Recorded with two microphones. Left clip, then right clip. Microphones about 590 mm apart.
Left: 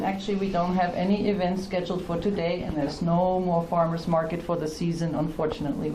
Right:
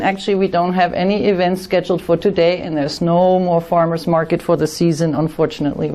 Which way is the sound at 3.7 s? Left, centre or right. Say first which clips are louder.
Right 9 dB; right.